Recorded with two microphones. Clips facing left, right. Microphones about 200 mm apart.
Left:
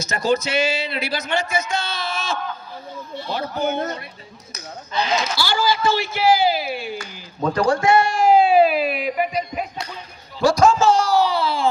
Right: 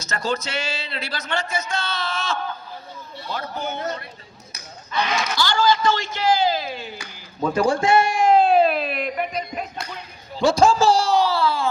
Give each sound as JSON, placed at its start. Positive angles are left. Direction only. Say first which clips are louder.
{"t": 0.0, "sound": "speech", "louder": "left 5 dB", "side_deg": 15}
{"t": 3.6, "sound": "a man's voice", "louder": "left 6 dB", "side_deg": 50}
{"t": 5.4, "sound": "speech", "louder": "right 5 dB", "side_deg": 10}
{"t": 7.5, "sound": "a man's voice", "louder": "left 1 dB", "side_deg": -25}
{"t": 8.1, "sound": "a sound", "louder": "left 2 dB", "side_deg": 5}
{"t": 10.4, "sound": "a man's voice", "louder": "left 1 dB", "side_deg": -30}
{"t": 11.2, "sound": "baby cry", "louder": "even", "side_deg": 20}